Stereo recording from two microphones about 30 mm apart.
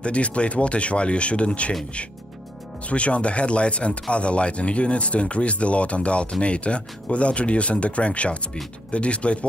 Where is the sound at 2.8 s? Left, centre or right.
Left.